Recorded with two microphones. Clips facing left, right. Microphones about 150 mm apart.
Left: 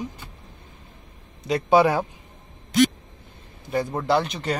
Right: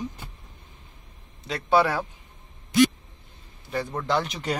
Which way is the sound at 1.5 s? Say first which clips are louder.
Left 4 dB; 15° left (ahead or behind).